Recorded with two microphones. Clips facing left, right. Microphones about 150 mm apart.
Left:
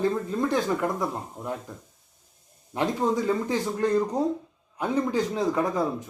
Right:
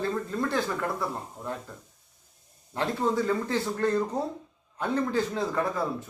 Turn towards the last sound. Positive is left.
turn(degrees=15)  # may be behind; listen again after turning